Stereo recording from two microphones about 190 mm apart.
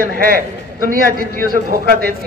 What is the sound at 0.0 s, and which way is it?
A man's voice, 50° right (ahead or behind).